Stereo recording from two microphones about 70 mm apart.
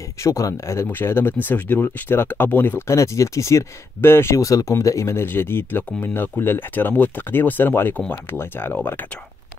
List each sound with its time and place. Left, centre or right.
0.2 s speech: left
0.8 s speech: left
2.9 s speech: left
4.4 s speech: left